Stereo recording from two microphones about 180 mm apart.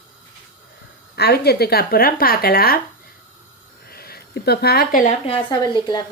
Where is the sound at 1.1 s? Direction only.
65° left (ahead or behind).